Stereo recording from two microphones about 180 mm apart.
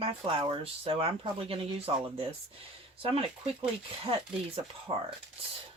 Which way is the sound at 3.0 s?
30° right (ahead or behind).